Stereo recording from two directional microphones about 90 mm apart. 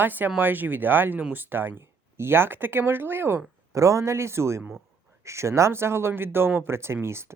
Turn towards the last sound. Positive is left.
turn(degrees=-25)  # may be behind; listen again after turning